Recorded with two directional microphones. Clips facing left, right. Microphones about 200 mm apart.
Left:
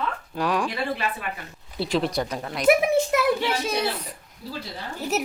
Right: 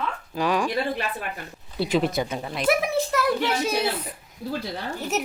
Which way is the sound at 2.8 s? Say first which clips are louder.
Left 3 dB; 15° left (ahead or behind).